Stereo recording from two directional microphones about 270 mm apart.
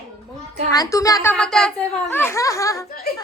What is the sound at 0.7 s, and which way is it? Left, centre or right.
A woman's voice, centre.